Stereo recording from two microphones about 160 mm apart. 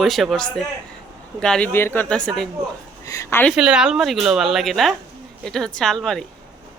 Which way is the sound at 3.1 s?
20° left (ahead or behind).